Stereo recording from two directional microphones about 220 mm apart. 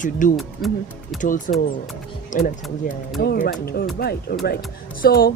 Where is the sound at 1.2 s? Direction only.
35° left (ahead or behind).